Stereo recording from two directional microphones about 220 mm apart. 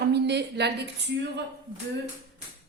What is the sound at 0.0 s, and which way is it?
A woman's voice, 50° right (ahead or behind).